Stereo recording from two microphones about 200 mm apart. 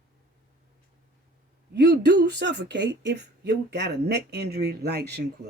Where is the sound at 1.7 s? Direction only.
60° right (ahead or behind).